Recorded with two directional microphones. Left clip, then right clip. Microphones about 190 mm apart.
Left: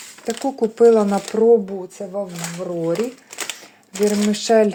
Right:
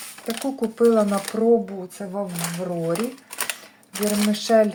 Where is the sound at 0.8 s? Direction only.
30° left (ahead or behind).